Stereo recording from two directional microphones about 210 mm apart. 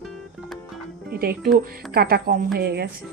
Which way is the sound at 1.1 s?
45° right (ahead or behind).